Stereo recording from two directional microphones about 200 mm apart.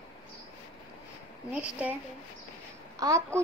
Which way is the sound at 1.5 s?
5° right (ahead or behind).